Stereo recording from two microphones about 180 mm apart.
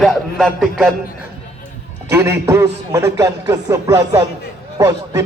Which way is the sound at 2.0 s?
15° right (ahead or behind).